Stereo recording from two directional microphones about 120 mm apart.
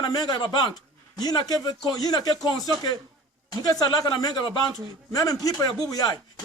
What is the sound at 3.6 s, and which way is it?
Speech, 30° left (ahead or behind).